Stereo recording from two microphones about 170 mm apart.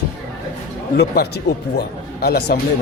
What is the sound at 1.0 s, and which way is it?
Speech, 70° left (ahead or behind).